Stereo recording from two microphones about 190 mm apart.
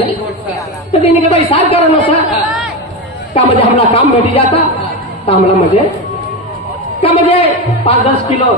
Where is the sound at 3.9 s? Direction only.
30° left (ahead or behind).